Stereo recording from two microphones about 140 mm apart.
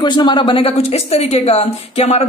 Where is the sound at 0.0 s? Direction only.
30° left (ahead or behind).